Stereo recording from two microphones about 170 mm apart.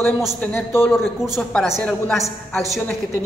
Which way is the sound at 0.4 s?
10° left (ahead or behind).